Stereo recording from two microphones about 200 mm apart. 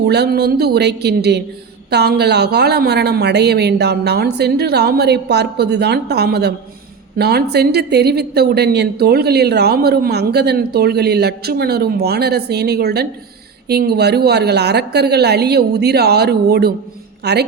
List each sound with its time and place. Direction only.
0.0 s a woman's voice: 55° right (ahead or behind)